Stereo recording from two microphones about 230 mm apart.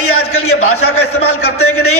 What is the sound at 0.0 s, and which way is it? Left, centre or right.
A man's voice, left.